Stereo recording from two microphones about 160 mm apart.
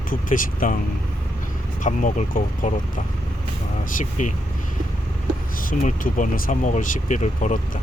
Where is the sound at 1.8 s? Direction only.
55° left (ahead or behind).